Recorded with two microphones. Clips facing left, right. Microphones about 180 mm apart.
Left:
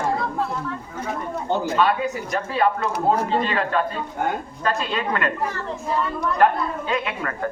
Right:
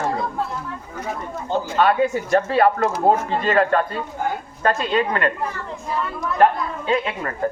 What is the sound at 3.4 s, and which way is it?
A man's voice, 45° right (ahead or behind).